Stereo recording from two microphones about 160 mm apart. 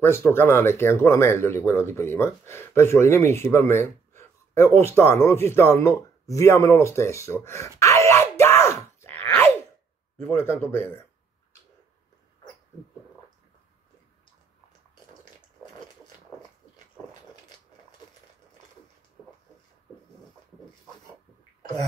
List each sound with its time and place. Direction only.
0.0 s speech: 15° left (ahead or behind)
7.8 s groan: 20° left (ahead or behind)
10.2 s speech: 15° left (ahead or behind)